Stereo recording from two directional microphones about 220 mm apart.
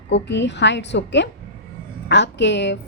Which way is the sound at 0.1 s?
55° left (ahead or behind).